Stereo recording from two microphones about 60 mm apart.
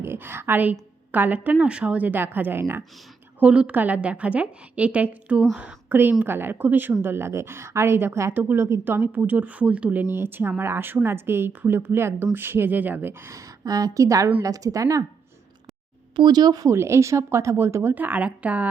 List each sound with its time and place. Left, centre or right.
0.0 s a woman's voice: right
3.4 s a woman's voice: right
8.3 s a woman's voice: right
13.3 s a woman's voice: right
16.6 s a woman's voice: right
17.9 s a woman's voice: right